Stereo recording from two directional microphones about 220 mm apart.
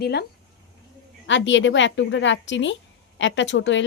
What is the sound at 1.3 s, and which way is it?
Speech, 55° left (ahead or behind).